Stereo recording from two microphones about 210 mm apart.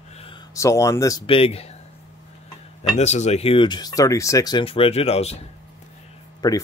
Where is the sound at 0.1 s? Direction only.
30° left (ahead or behind).